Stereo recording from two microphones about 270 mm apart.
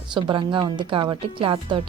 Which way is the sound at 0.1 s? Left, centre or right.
Centre.